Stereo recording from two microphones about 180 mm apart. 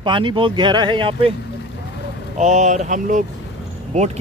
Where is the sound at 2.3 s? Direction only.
40° right (ahead or behind).